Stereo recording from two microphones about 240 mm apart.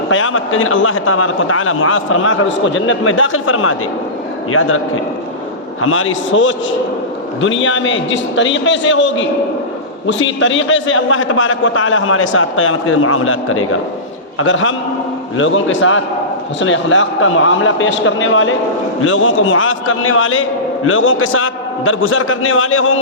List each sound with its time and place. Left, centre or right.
0.1 s a man's voice: left
5.8 s a man's voice: left